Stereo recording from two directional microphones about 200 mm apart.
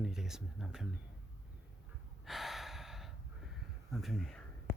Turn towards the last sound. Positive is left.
turn(degrees=5)  # may be behind; listen again after turning